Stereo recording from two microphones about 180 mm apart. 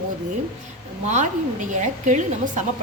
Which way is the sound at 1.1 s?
40° right (ahead or behind).